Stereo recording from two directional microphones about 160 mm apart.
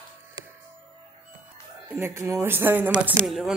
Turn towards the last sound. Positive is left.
turn(degrees=0)  # may be behind; listen again after turning